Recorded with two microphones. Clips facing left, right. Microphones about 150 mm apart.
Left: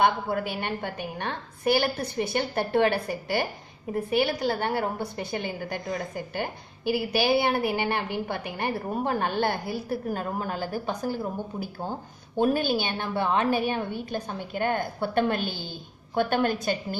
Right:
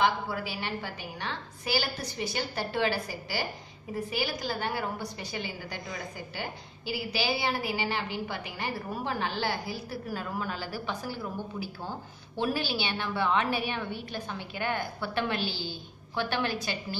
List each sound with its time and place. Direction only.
0.0 s a woman's voice: 55° left (ahead or behind)